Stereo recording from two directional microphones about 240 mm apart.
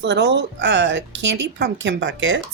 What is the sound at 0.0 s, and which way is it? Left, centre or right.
Speech, right.